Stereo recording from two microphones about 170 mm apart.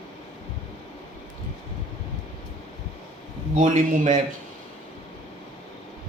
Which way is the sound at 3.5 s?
50° right (ahead or behind).